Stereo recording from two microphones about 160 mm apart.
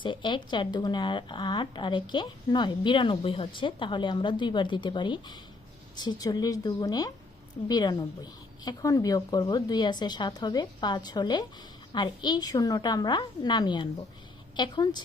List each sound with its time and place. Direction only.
0.0 s speech: 30° left (ahead or behind)